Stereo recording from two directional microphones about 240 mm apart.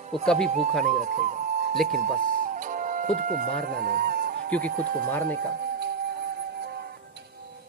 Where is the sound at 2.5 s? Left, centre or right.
Right.